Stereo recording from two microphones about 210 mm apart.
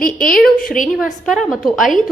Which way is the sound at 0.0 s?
40° left (ahead or behind).